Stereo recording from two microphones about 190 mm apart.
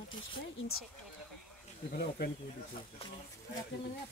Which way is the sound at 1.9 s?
55° left (ahead or behind).